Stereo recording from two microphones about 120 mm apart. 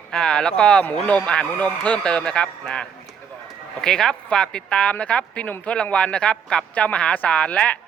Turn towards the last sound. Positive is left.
turn(degrees=10)  # may be behind; listen again after turning